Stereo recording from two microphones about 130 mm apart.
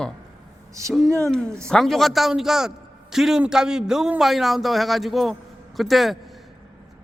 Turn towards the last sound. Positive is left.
turn(degrees=0)  # may be behind; listen again after turning